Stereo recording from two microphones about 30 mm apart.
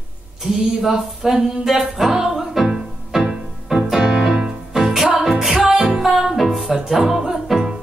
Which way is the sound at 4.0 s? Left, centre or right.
Right.